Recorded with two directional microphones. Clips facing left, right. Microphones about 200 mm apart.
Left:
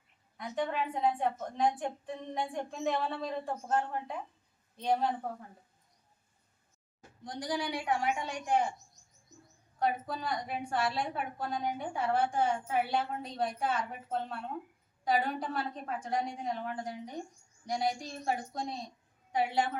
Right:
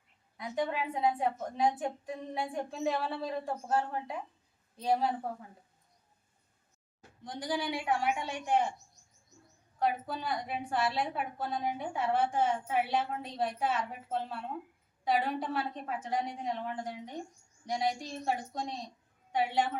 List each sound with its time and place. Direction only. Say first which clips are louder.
0.3 s a woman's voice: even; 10° right (ahead or behind)
7.3 s a woman's voice: right 1 dB; 5° right (ahead or behind)
9.7 s a woman's voice: even; centre (ahead or behind)